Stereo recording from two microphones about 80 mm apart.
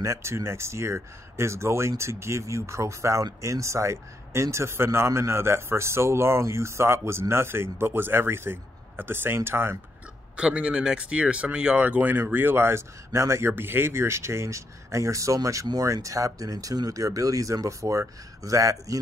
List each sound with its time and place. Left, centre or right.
0.0 s speech: right
10.3 s speech: centre; by 18.9 s right